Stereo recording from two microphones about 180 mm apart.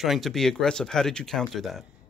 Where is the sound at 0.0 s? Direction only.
Centre (ahead or behind).